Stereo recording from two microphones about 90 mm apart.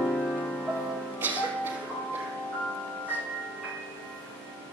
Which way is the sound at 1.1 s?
20° right (ahead or behind).